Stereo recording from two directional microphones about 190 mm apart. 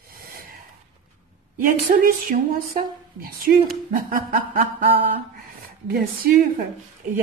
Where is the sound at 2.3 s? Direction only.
50° right (ahead or behind).